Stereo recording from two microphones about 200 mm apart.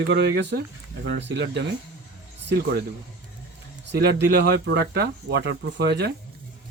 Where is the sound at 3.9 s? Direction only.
55° right (ahead or behind).